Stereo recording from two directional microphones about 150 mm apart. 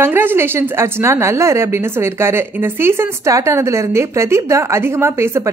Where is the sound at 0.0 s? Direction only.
15° right (ahead or behind).